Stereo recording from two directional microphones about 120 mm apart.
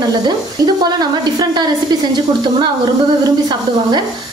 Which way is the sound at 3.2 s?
35° right (ahead or behind).